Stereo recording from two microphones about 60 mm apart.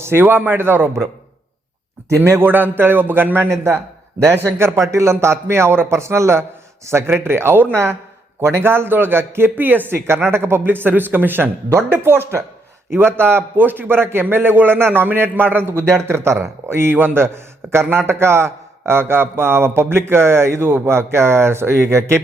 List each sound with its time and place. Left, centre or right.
0.0 s a man's voice: right
2.0 s a man's voice: right
2.4 s a man's voice: right
3.5 s a man's voice: right